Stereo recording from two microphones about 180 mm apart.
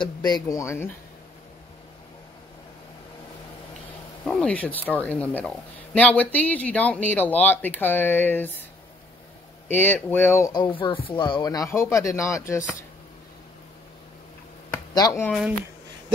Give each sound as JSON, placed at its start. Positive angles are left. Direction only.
{"t": 0.0, "sound": "speech", "side_deg": 20}
{"t": 4.2, "sound": "speech", "side_deg": 5}
{"t": 9.7, "sound": "speech", "side_deg": 10}
{"t": 14.7, "sound": "finger snapping", "side_deg": 15}